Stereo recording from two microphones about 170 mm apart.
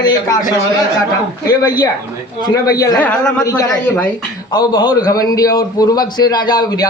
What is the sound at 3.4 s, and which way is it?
Speech, 20° left (ahead or behind).